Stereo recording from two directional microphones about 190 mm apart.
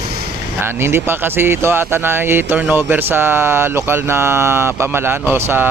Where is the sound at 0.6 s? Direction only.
10° right (ahead or behind).